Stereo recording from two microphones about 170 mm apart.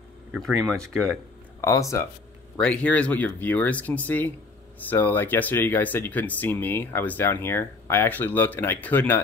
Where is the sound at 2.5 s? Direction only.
5° left (ahead or behind).